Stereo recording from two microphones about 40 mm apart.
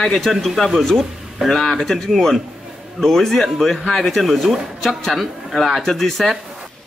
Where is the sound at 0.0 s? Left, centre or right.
Centre.